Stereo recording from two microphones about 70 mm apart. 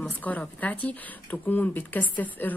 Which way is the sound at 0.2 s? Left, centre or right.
Left.